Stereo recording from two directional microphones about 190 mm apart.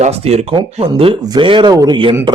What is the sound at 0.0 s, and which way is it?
A man's voice, 35° right (ahead or behind).